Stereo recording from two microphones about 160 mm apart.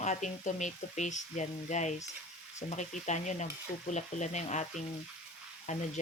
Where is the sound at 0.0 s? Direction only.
45° left (ahead or behind).